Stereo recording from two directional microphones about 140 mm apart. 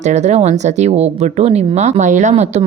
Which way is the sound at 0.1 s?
55° right (ahead or behind).